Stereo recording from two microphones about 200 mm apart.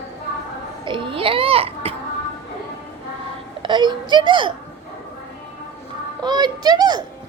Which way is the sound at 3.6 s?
25° right (ahead or behind).